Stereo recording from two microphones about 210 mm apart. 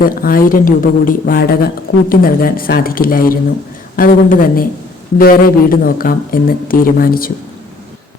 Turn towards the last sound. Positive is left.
turn(degrees=45)  # may be behind; listen again after turning